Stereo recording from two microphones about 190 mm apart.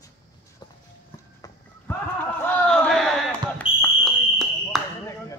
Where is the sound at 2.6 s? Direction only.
5° left (ahead or behind).